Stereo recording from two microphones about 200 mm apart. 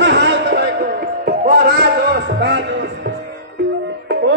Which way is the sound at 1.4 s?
50° right (ahead or behind).